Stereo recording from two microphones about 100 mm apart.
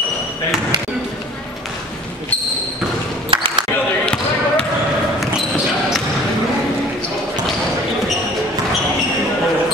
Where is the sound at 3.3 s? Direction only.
60° right (ahead or behind).